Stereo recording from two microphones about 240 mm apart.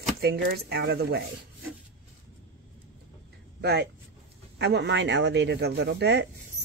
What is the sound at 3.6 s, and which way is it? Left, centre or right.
A woman's voice, right.